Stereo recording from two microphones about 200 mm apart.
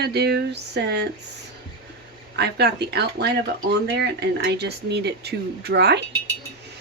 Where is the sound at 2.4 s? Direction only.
55° right (ahead or behind).